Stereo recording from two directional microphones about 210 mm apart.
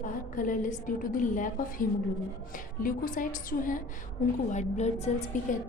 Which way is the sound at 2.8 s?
40° left (ahead or behind).